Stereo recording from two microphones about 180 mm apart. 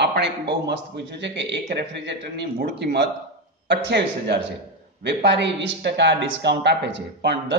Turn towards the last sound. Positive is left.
turn(degrees=-75)  # may be behind; listen again after turning